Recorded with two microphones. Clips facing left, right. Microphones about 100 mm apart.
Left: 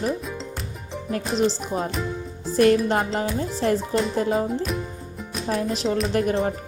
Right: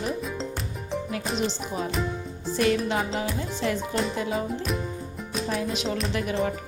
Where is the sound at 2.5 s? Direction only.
45° left (ahead or behind).